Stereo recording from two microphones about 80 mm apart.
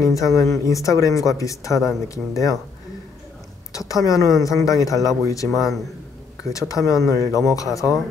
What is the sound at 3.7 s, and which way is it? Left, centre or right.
A man's voice, left.